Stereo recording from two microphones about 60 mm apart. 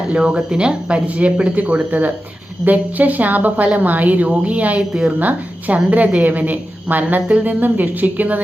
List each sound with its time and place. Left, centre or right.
0.1 s a woman's voice: centre